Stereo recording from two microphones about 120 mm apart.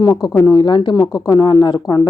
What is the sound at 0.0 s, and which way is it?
A woman's voice, 30° left (ahead or behind).